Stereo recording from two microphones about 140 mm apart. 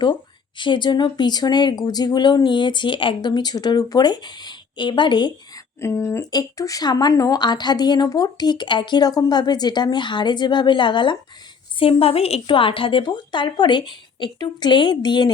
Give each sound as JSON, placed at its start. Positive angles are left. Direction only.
{"t": 0.0, "sound": "speech", "side_deg": 35}
{"t": 5.8, "sound": "speech", "side_deg": 20}